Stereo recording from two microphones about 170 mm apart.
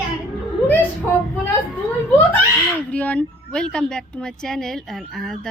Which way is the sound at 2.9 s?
5° left (ahead or behind).